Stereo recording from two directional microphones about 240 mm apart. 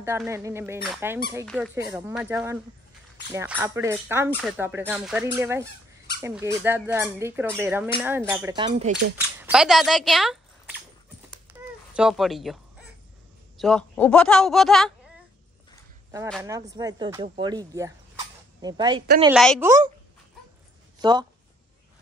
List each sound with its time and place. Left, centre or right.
0.0 s a man's voice: centre
1.9 s speech: centre
8.5 s speech: right
9.4 s speech: centre
11.6 s a sound: centre
11.9 s a man's voice: centre
13.6 s a man's voice: centre
16.4 s speech: centre
19.3 s a man's voice: centre
19.6 s speech: centre
21.0 s speech: centre